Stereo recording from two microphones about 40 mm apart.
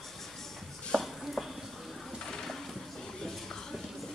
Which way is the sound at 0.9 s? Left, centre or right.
Centre.